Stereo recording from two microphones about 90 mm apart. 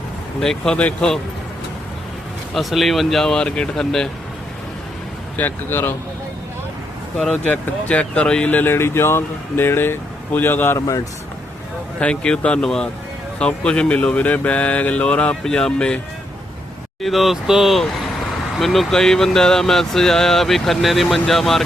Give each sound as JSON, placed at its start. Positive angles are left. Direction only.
{"t": 0.3, "sound": "speech", "side_deg": 5}
{"t": 2.5, "sound": "speech", "side_deg": 0}
{"t": 5.4, "sound": "speech", "side_deg": 20}
{"t": 7.2, "sound": "speech", "side_deg": 0}
{"t": 7.5, "sound": "speech", "side_deg": 15}
{"t": 10.8, "sound": "speech", "side_deg": 40}
{"t": 11.9, "sound": "speech", "side_deg": 10}
{"t": 17.0, "sound": "speech", "side_deg": 0}